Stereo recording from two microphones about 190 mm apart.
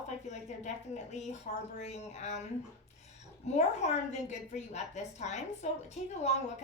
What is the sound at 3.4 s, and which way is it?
A woman's voice, 35° left (ahead or behind).